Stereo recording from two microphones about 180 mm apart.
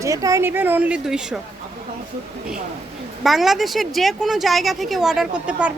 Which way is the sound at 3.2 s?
Centre (ahead or behind).